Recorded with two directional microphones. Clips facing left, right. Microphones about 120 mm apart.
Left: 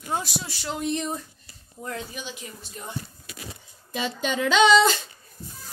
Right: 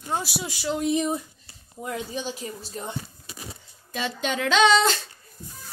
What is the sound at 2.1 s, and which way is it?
Speech, 35° right (ahead or behind).